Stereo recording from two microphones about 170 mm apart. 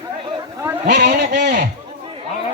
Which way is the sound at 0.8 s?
75° right (ahead or behind).